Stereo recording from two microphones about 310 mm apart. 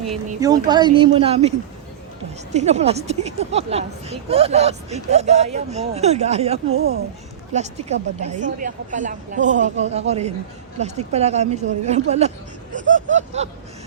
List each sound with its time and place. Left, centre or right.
0.3 s speech: centre
6.7 s speech: right
12.9 s a sound: right